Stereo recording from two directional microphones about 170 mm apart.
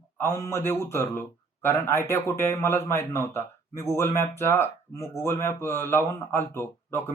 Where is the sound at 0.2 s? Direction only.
15° left (ahead or behind).